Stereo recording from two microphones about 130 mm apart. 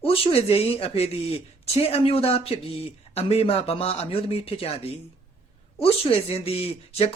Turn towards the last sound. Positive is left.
turn(degrees=50)  # may be behind; listen again after turning